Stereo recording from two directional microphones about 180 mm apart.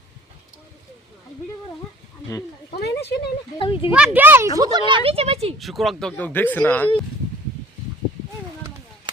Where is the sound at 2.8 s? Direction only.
65° left (ahead or behind).